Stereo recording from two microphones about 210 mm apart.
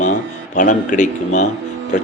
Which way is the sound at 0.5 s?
40° left (ahead or behind).